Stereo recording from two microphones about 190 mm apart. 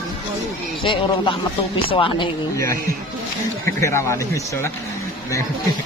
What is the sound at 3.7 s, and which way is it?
Speech, 15° left (ahead or behind).